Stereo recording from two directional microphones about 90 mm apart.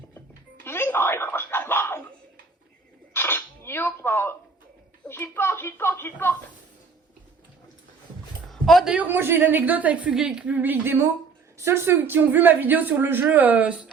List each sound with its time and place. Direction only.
0.6 s music: 25° left (ahead or behind)
3.1 s a sound: 25° left (ahead or behind)
5.0 s speech: 25° left (ahead or behind)
8.4 s a sound: 5° left (ahead or behind)
8.8 s a man's voice: 10° right (ahead or behind)
9.0 s speech: 25° right (ahead or behind)